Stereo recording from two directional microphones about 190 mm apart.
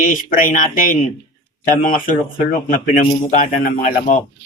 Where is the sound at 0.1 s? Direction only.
45° left (ahead or behind).